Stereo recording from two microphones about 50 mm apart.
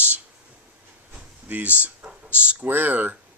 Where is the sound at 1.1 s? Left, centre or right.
Right.